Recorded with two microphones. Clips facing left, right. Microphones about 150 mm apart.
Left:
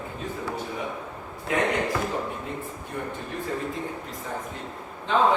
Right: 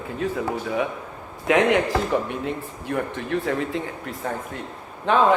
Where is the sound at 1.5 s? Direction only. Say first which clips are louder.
Right 6 dB; 90° right.